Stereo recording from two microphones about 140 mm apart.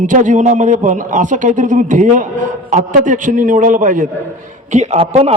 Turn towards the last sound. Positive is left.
turn(degrees=-50)  # may be behind; listen again after turning